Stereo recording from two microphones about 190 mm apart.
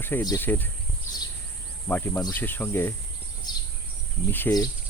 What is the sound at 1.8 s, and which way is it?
Speech, 10° left (ahead or behind).